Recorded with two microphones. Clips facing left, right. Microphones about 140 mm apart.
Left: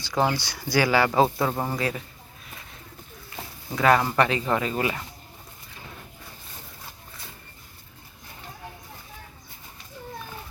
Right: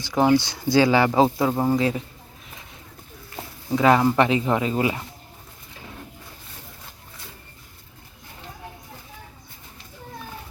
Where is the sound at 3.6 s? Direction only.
20° right (ahead or behind).